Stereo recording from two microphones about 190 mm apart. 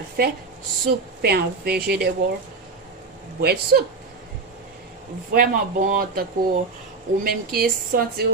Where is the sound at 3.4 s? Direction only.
55° right (ahead or behind).